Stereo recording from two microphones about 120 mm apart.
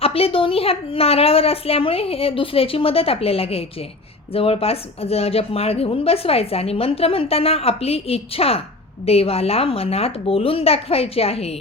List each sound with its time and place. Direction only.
0.0 s a woman's voice: 55° left (ahead or behind)